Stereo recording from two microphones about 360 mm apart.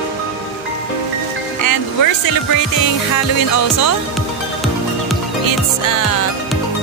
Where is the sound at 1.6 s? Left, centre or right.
Left.